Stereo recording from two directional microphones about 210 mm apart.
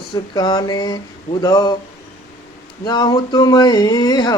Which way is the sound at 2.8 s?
20° left (ahead or behind).